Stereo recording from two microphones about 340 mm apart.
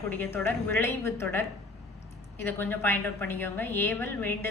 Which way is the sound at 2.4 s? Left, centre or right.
Centre.